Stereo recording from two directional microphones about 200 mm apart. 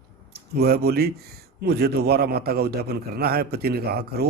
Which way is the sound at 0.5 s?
50° right (ahead or behind).